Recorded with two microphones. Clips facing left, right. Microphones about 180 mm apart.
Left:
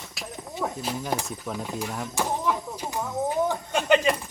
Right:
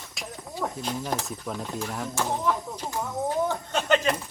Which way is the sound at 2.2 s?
10° left (ahead or behind).